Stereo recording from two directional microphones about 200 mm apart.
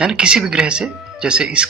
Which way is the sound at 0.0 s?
5° right (ahead or behind).